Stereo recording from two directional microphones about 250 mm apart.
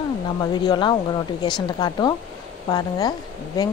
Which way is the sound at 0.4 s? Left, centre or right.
Centre.